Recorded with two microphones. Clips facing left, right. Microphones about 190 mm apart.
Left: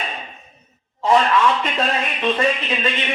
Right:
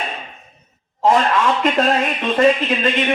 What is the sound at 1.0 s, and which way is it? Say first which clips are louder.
Speech: right 1 dB; 50° right (ahead or behind).